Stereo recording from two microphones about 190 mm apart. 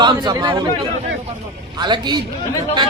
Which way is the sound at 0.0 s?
20° right (ahead or behind).